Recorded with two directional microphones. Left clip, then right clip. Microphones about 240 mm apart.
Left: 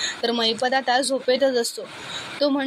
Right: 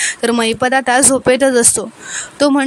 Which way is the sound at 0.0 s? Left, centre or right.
Right.